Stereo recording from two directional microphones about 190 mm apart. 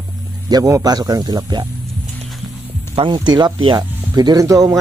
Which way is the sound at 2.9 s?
25° right (ahead or behind).